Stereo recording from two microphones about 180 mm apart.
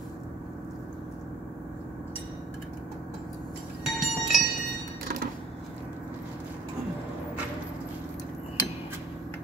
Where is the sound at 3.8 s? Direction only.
Centre (ahead or behind).